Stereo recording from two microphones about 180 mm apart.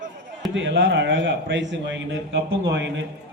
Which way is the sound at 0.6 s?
85° right.